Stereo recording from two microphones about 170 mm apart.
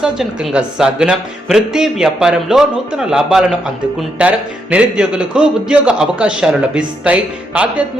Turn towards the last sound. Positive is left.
turn(degrees=-5)  # may be behind; listen again after turning